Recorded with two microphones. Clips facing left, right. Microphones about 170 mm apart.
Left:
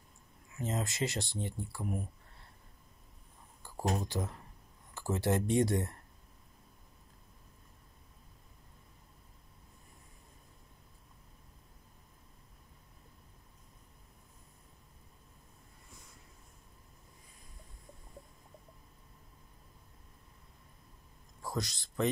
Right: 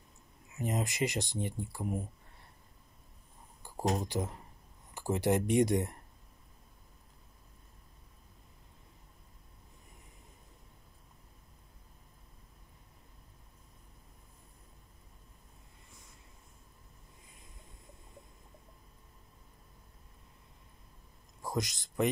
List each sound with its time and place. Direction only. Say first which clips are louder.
0.6 s speech: right 2 dB; 15° right (ahead or behind)
3.6 s speech: right 2 dB; 15° right (ahead or behind)
21.4 s a sound: right 2 dB; 15° right (ahead or behind)